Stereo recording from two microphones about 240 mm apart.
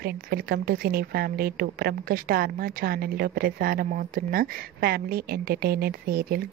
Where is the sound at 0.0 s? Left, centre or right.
Right.